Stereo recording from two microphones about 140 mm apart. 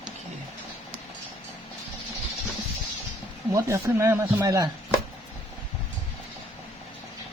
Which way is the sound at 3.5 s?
20° right (ahead or behind).